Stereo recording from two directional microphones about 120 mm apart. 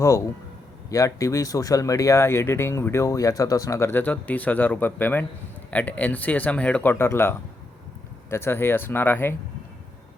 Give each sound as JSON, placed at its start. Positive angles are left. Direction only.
{"t": 0.9, "sound": "speech", "side_deg": 25}